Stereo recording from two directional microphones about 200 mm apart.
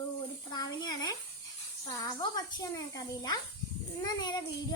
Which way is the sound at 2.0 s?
20° left (ahead or behind).